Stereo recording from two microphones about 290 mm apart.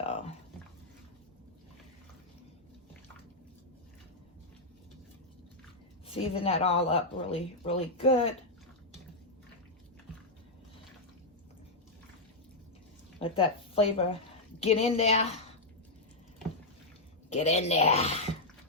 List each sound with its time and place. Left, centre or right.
6.1 s speech: centre
13.1 s speech: centre
17.2 s speech: left